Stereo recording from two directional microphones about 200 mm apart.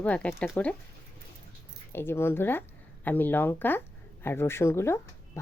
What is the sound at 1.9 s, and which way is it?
Speech, 10° left (ahead or behind).